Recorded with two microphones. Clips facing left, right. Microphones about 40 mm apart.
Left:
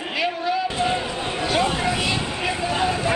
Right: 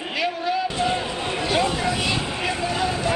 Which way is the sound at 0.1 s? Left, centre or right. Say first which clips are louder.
Left 1 dB; centre.